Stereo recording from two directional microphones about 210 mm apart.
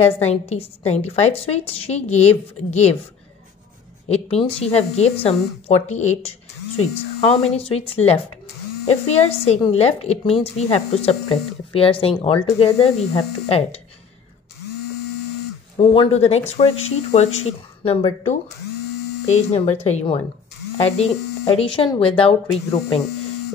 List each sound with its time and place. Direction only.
0.0 s a woman's voice: 30° left (ahead or behind)
4.1 s a woman's voice: 30° left (ahead or behind)
15.8 s a woman's voice: 25° left (ahead or behind)
19.2 s a woman's voice: 30° left (ahead or behind)